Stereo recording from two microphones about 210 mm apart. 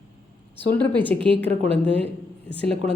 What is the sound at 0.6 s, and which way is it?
A woman's voice, 10° left (ahead or behind).